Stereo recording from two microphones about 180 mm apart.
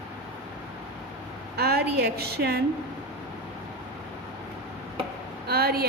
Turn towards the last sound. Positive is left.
turn(degrees=-60)  # may be behind; listen again after turning